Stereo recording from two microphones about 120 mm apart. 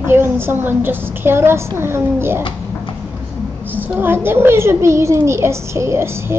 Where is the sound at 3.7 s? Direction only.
15° right (ahead or behind).